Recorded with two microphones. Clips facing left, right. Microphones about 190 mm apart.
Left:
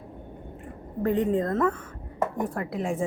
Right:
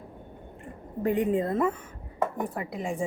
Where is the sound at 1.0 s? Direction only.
10° right (ahead or behind).